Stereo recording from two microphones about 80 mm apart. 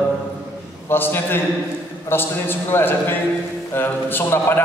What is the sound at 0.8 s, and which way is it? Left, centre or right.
A man's voice, left.